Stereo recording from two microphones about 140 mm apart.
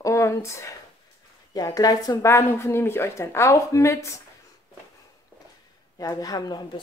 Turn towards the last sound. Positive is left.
turn(degrees=25)  # may be behind; listen again after turning